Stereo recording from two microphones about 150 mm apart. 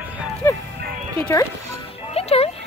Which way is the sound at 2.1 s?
40° left (ahead or behind).